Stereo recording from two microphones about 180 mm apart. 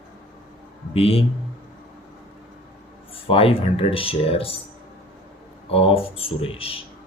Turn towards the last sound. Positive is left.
turn(degrees=30)  # may be behind; listen again after turning